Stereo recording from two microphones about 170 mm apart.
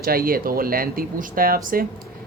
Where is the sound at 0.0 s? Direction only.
60° right (ahead or behind).